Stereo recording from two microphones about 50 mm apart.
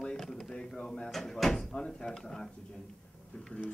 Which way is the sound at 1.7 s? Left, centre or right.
Left.